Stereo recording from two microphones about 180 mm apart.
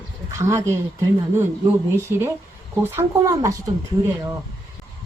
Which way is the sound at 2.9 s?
15° right (ahead or behind).